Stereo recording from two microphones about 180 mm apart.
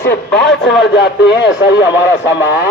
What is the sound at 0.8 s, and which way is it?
Speech, 70° left (ahead or behind).